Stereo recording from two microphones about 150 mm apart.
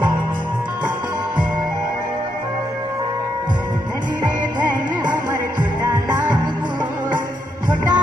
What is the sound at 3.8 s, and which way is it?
Music, 30° right (ahead or behind).